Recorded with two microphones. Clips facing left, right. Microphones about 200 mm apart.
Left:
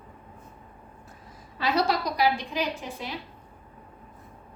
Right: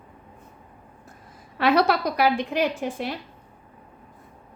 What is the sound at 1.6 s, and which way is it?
A woman's voice, 60° right (ahead or behind).